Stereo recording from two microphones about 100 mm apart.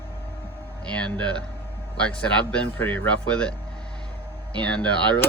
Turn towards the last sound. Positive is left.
turn(degrees=15)  # may be behind; listen again after turning